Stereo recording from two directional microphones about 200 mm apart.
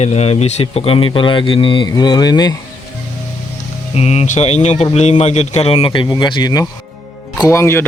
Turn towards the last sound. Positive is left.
turn(degrees=15)  # may be behind; listen again after turning